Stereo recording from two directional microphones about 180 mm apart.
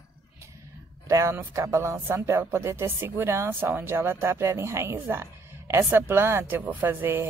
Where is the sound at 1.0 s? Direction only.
15° right (ahead or behind).